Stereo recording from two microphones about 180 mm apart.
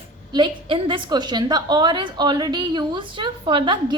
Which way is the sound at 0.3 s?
25° right (ahead or behind).